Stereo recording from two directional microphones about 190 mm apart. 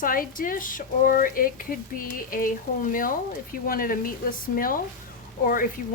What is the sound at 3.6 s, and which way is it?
Speech, 50° left (ahead or behind).